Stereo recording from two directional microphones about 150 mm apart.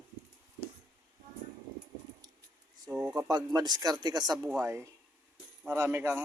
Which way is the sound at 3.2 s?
25° right (ahead or behind).